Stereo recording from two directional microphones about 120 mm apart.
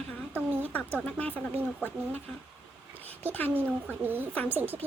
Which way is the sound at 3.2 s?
15° left (ahead or behind).